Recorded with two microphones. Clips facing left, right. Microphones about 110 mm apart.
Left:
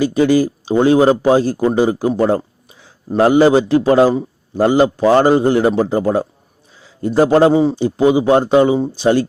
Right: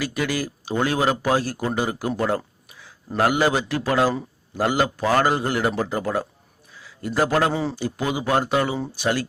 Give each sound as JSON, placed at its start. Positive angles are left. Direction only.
{"t": 0.0, "sound": "a man's voice", "side_deg": 25}